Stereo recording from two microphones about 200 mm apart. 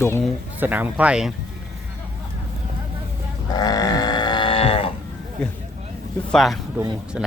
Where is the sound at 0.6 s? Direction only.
10° right (ahead or behind).